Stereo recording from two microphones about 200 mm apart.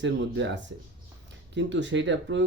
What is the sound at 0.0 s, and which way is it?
Speech, 65° right (ahead or behind).